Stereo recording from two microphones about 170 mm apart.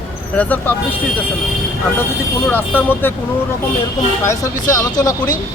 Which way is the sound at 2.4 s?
10° left (ahead or behind).